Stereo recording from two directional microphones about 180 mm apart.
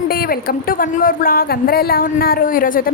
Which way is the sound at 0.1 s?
55° left (ahead or behind).